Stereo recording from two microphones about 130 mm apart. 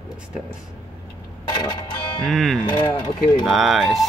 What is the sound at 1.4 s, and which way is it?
Music, 30° left (ahead or behind).